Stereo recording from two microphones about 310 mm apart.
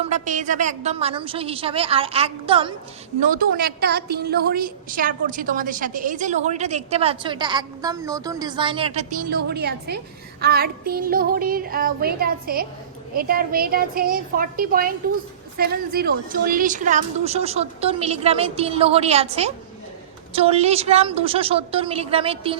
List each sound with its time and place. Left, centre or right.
0.0 s a woman's voice: right